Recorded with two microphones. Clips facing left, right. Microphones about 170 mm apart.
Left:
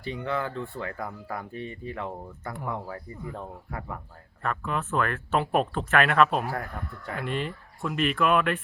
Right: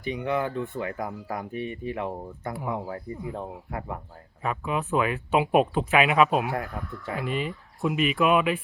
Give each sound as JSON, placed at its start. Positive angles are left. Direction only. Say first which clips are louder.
{"t": 0.0, "sound": "speech", "louder": "right 3 dB", "side_deg": -15}
{"t": 2.6, "sound": "speech", "louder": "right 2 dB", "side_deg": -5}
{"t": 2.9, "sound": "speech", "louder": "right 4 dB", "side_deg": -15}
{"t": 4.4, "sound": "speech", "louder": "right 2 dB", "side_deg": -5}